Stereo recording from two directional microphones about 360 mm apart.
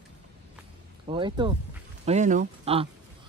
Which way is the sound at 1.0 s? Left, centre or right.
Centre.